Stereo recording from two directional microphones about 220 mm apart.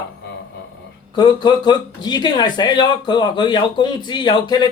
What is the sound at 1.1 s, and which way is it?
Speech, 20° left (ahead or behind).